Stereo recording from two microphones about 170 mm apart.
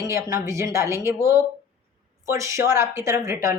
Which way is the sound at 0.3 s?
20° right (ahead or behind).